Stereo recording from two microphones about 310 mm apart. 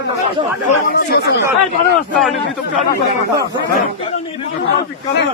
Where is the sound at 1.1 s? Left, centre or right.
Left.